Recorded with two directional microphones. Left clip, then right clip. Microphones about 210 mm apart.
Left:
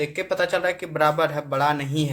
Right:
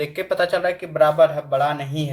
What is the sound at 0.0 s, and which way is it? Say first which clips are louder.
Speech: right 2 dB; 10° left (ahead or behind).